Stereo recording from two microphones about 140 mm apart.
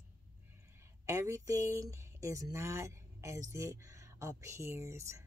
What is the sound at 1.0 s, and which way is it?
Speech, 20° right (ahead or behind).